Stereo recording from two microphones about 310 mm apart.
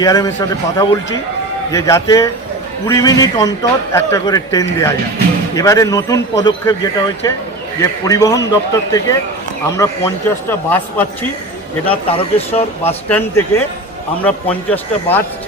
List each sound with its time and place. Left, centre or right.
0.0 s a man's voice: centre
11.9 s speech: centre
13.1 s a man's voice: centre